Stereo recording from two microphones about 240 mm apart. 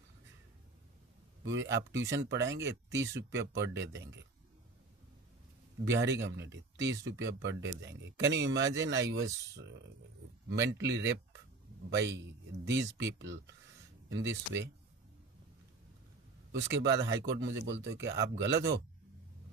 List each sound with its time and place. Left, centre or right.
1.5 s speech: right
2.9 s speech: centre
3.2 s speech: right
5.8 s speech: right
10.5 s speech: right
12.6 s speech: right
16.5 s speech: right